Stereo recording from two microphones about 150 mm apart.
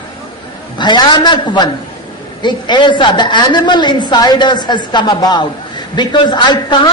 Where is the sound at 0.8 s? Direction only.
30° left (ahead or behind).